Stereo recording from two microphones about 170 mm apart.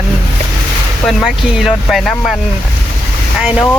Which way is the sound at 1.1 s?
Centre (ahead or behind).